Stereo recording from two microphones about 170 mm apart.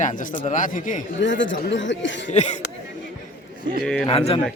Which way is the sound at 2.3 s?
40° left (ahead or behind).